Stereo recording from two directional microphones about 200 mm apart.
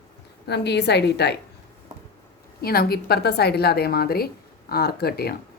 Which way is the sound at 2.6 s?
50° left (ahead or behind).